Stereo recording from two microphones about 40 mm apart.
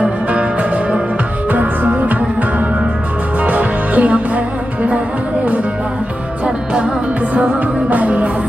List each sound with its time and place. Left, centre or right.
0.0 s music: right
1.5 s music: right
3.4 s music: right
7.3 s music: right